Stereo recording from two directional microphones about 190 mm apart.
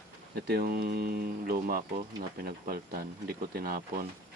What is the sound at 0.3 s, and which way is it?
Speech, 55° right (ahead or behind).